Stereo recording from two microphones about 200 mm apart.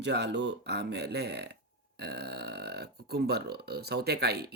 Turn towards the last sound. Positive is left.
turn(degrees=-55)  # may be behind; listen again after turning